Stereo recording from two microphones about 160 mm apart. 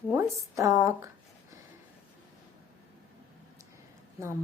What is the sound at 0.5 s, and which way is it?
Speech, 20° right (ahead or behind).